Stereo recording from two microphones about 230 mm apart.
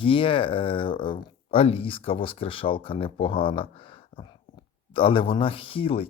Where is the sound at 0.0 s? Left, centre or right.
Left.